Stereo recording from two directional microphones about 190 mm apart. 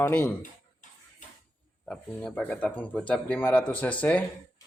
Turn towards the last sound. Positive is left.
turn(degrees=5)  # may be behind; listen again after turning